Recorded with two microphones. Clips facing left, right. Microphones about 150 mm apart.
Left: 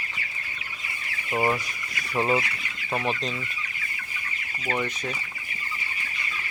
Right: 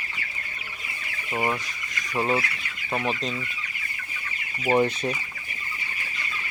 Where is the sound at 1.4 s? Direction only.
10° left (ahead or behind).